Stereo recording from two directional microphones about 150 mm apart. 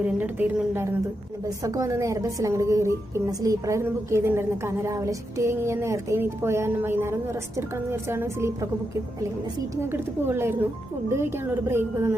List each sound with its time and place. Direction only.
0.0 s a woman's voice: 10° right (ahead or behind)
9.9 s a woman's voice: 15° right (ahead or behind)